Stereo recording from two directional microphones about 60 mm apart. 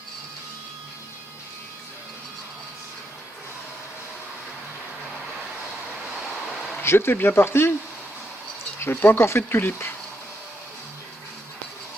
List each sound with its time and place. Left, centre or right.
6.8 s speech: left
8.8 s speech: left